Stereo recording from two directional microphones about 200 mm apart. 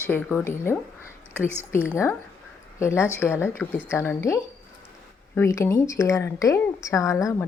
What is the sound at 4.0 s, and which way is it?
A woman's voice, 15° left (ahead or behind).